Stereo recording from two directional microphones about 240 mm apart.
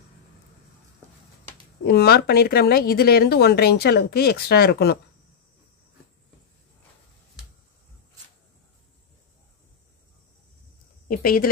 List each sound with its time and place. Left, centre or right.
1.9 s speech: left
11.1 s speech: left